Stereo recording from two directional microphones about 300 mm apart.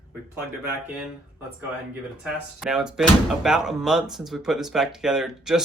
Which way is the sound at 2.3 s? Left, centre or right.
Centre.